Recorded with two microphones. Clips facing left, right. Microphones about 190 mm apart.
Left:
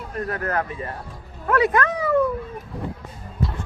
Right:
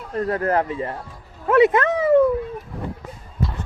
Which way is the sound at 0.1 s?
25° right (ahead or behind).